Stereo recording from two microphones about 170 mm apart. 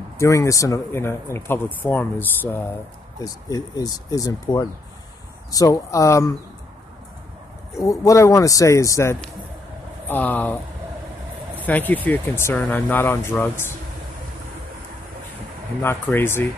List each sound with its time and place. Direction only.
0.2 s speech: 20° left (ahead or behind)
7.7 s speech: 20° left (ahead or behind)
11.6 s speech: 10° left (ahead or behind)
15.8 s speech: 15° left (ahead or behind)